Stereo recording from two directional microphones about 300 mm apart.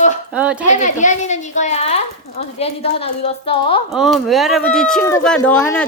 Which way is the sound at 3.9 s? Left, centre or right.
Centre.